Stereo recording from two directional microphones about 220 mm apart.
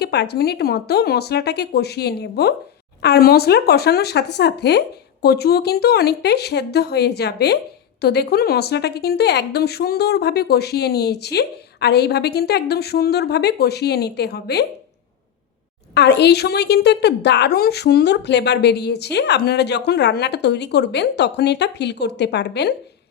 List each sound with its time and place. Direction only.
0.0 s a woman's voice: 50° left (ahead or behind)
16.0 s a woman's voice: 50° left (ahead or behind)